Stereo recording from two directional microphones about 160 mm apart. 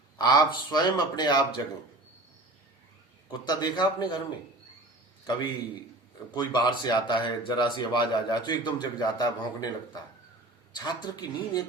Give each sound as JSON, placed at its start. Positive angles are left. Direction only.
{"t": 0.2, "sound": "speech", "side_deg": 25}
{"t": 3.4, "sound": "speech", "side_deg": 25}
{"t": 6.3, "sound": "speech", "side_deg": 25}